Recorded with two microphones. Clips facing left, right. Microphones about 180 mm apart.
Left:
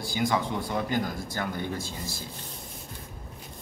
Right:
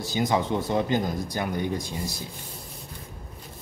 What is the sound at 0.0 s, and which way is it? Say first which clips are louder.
Speech: right 2 dB; 20° right (ahead or behind).